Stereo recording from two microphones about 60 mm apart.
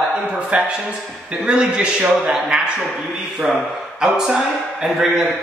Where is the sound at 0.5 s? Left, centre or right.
Right.